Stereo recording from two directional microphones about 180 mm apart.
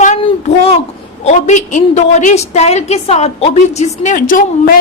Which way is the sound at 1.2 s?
40° left (ahead or behind).